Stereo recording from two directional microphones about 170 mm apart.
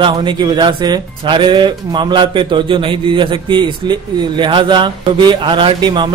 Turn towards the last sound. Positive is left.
turn(degrees=-25)  # may be behind; listen again after turning